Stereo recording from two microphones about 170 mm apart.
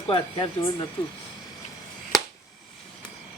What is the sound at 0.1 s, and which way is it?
Speech, 30° left (ahead or behind).